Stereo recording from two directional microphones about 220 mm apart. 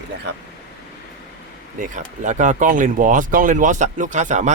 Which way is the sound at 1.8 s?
35° right (ahead or behind).